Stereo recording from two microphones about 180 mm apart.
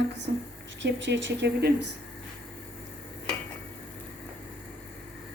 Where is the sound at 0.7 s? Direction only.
85° right.